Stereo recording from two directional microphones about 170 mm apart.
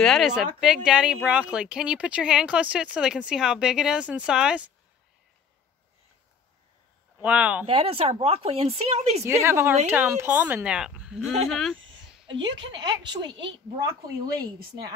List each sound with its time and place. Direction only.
0.0 s speech: centre (ahead or behind)
7.2 s a woman's voice: 10° right (ahead or behind)
7.6 s speech: 35° right (ahead or behind)
9.2 s a woman's voice: 15° right (ahead or behind); by 12.2 s centre (ahead or behind)
12.7 s a woman's voice: 25° right (ahead or behind)